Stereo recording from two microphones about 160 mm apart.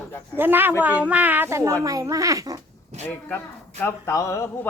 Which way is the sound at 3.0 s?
10° left (ahead or behind).